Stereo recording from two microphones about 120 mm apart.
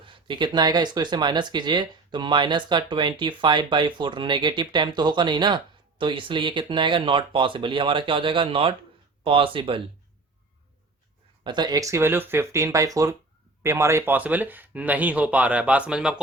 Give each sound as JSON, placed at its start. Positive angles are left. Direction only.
{"t": 0.0, "sound": "speech", "side_deg": -45}
{"t": 11.4, "sound": "speech", "side_deg": -35}